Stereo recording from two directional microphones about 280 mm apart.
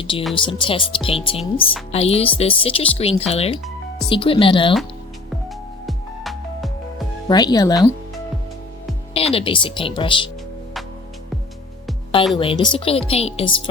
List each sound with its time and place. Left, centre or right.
0.0 s speech: centre
5.8 s music: centre
7.3 s speech: centre
9.1 s speech: centre
12.3 s speech: centre